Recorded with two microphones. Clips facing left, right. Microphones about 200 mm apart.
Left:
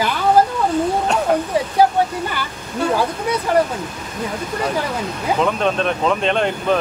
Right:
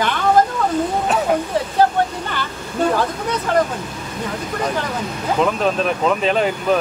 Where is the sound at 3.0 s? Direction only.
10° left (ahead or behind).